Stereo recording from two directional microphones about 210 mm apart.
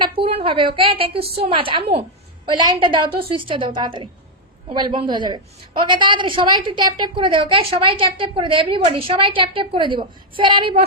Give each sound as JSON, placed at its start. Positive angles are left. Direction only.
{"t": 0.0, "sound": "a woman's voice", "side_deg": -25}